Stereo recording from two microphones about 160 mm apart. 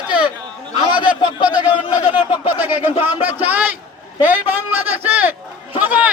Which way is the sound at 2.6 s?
10° right (ahead or behind).